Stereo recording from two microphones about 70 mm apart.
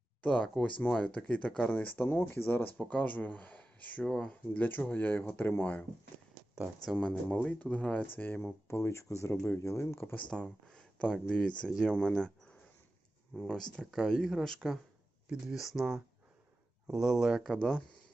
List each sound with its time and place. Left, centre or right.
0.2 s speech: centre
1.8 s speech: left
6.9 s speech: left
8.0 s speech: left
10.2 s speech: centre
13.3 s speech: centre